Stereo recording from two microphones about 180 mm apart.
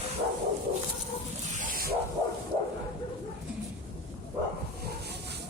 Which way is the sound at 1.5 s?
50° right (ahead or behind).